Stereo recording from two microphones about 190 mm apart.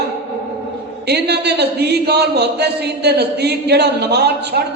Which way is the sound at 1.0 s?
60° right (ahead or behind).